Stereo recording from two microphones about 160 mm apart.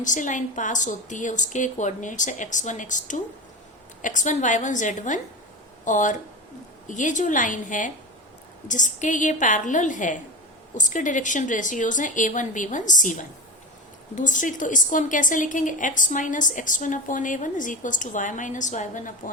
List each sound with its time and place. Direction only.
0.0 s a woman's voice: 50° left (ahead or behind)